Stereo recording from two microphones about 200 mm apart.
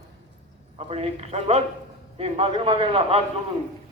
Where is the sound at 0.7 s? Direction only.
30° right (ahead or behind).